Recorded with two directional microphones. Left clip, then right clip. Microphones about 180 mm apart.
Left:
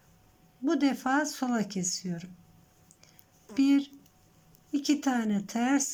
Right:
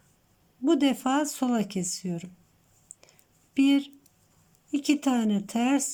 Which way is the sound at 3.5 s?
10° right (ahead or behind).